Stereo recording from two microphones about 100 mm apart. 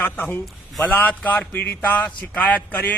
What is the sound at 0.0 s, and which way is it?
A man's voice, 20° left (ahead or behind).